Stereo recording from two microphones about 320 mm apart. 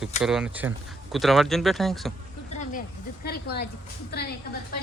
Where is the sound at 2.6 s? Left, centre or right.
Left.